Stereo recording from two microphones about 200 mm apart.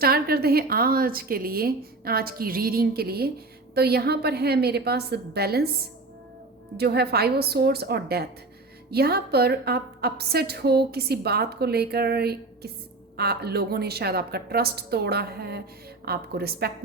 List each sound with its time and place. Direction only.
0.0 s a woman's voice: 50° right (ahead or behind)
6.7 s a woman's voice: 55° right (ahead or behind)